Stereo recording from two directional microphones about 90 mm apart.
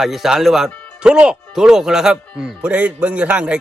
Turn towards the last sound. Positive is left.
turn(degrees=-15)  # may be behind; listen again after turning